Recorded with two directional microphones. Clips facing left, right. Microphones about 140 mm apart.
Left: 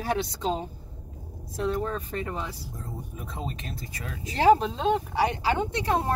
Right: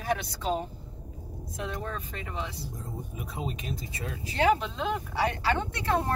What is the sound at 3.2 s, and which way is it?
Speech, 5° right (ahead or behind).